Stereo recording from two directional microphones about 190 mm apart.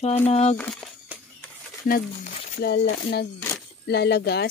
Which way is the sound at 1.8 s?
50° left (ahead or behind).